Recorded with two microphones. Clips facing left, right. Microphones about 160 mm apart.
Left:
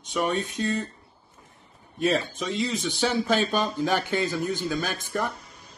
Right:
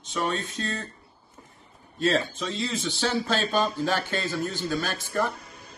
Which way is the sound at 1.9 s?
15° left (ahead or behind).